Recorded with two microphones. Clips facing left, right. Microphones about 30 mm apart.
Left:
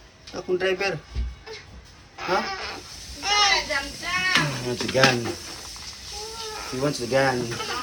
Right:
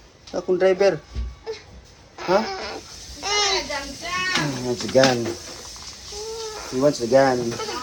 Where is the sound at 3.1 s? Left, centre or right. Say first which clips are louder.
Left 2 dB; centre.